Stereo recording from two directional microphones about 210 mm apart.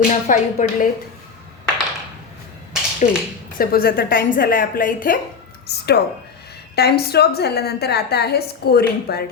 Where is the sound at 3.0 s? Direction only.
30° left (ahead or behind).